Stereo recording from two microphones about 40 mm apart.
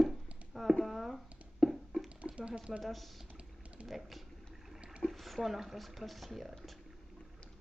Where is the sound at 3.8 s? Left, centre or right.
Centre.